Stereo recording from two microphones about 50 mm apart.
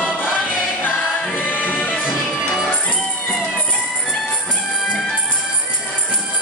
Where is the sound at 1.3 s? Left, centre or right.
Left.